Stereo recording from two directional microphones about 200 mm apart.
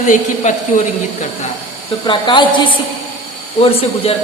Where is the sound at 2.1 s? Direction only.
25° left (ahead or behind).